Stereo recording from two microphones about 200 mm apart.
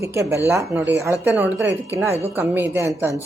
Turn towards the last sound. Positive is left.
turn(degrees=-15)  # may be behind; listen again after turning